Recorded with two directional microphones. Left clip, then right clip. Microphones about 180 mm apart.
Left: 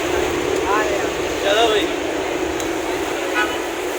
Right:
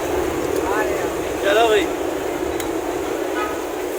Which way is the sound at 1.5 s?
20° right (ahead or behind).